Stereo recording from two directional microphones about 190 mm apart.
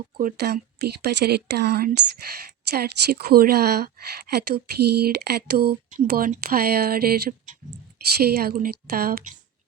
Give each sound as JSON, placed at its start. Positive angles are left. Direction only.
{"t": 0.2, "sound": "speech", "side_deg": -50}